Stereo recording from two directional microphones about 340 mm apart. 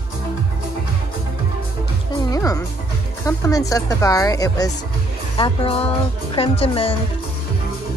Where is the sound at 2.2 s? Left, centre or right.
Centre.